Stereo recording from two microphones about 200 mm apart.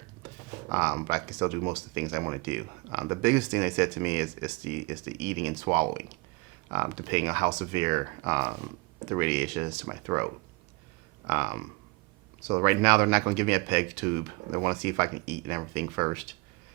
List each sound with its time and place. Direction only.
0.5 s speech: 10° right (ahead or behind)
12.6 s speech: 10° right (ahead or behind)